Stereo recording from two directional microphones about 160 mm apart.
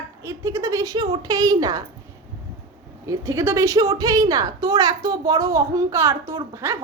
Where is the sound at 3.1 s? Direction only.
20° right (ahead or behind).